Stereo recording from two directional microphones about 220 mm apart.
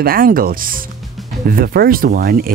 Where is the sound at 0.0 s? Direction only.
40° right (ahead or behind).